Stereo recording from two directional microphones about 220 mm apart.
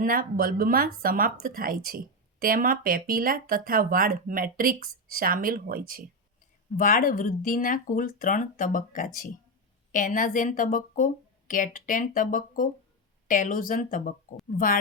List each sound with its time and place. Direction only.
0.0 s speech: 40° right (ahead or behind)
6.7 s a woman's voice: 40° left (ahead or behind)